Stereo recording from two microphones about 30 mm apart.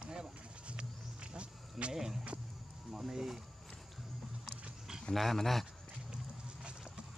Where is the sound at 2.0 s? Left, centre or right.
Centre.